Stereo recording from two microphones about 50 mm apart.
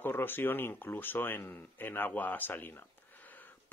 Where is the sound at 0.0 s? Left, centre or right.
Left.